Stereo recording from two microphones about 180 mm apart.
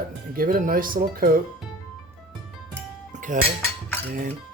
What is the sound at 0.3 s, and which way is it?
Speech, 50° right (ahead or behind).